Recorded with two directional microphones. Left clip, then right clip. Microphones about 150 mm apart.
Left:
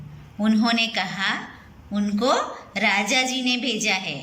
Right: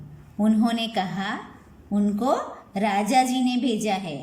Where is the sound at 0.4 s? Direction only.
50° right (ahead or behind).